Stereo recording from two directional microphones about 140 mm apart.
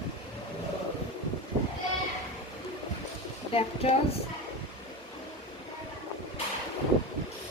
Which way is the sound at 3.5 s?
40° left (ahead or behind).